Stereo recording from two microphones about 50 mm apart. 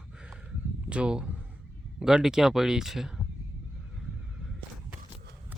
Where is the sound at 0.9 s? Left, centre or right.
Centre.